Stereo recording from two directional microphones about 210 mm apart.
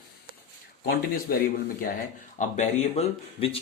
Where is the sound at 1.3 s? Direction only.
45° left (ahead or behind).